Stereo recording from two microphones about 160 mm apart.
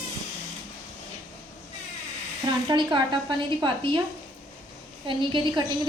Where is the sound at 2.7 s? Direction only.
30° right (ahead or behind).